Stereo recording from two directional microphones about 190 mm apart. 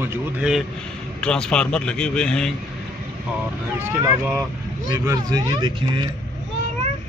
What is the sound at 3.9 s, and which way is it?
A man's voice, 10° right (ahead or behind).